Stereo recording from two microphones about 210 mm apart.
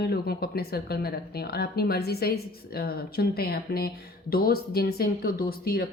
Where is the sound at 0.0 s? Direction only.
50° left (ahead or behind).